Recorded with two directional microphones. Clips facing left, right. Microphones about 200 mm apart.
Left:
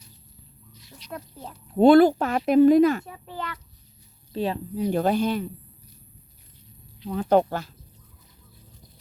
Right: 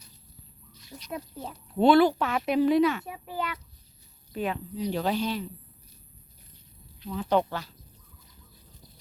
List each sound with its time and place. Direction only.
1.8 s speech: 45° left (ahead or behind)
3.1 s a child's voice: 10° right (ahead or behind)
4.3 s speech: 30° left (ahead or behind)
4.8 s speech: 50° left (ahead or behind)
7.0 s speech: 55° left (ahead or behind)